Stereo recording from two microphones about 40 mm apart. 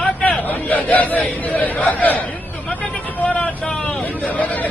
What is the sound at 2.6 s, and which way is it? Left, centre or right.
Vehicle, left.